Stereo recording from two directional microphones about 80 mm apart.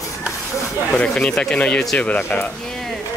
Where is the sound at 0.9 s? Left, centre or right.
Centre.